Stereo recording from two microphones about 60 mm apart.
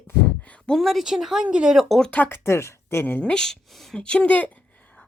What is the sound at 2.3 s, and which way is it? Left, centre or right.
Speech, left.